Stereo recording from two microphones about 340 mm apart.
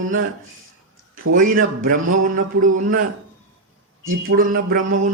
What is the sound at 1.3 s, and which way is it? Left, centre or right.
Speech, right.